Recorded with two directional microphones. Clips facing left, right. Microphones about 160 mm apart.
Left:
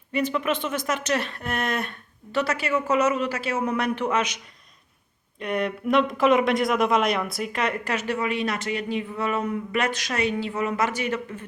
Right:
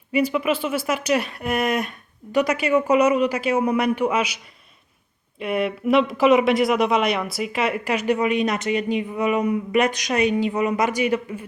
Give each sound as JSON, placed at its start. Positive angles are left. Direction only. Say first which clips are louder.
{"t": 0.1, "sound": "speech", "louder": "right 4 dB", "side_deg": -10}
{"t": 5.4, "sound": "speech", "louder": "right 3 dB", "side_deg": -5}